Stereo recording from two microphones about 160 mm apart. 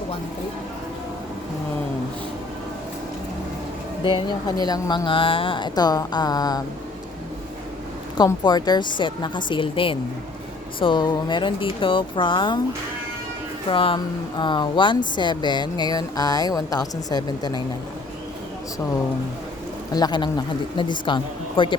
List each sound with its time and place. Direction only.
4.0 s speech: 30° left (ahead or behind)
8.2 s speech: 25° left (ahead or behind)
13.7 s speech: 30° left (ahead or behind)
19.9 s speech: 25° left (ahead or behind)